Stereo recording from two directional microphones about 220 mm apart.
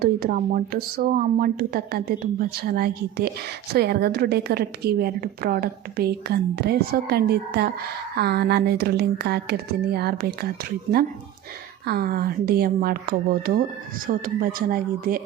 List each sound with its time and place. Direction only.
0.0 s a woman's voice: 40° right (ahead or behind)